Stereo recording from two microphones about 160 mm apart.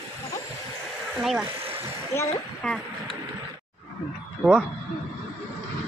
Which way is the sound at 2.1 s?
15° left (ahead or behind).